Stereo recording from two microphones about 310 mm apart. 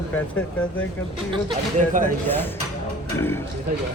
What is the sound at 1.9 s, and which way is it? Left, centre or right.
Speech, right.